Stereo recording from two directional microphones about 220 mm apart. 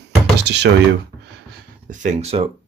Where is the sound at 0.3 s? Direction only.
50° right (ahead or behind).